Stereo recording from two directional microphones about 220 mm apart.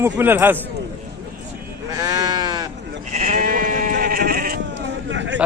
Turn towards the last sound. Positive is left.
turn(degrees=-55)  # may be behind; listen again after turning